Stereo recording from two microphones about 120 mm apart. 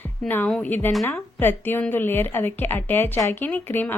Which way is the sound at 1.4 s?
15° left (ahead or behind).